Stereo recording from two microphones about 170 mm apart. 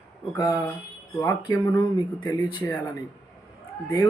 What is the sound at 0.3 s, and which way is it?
Speech, 20° left (ahead or behind).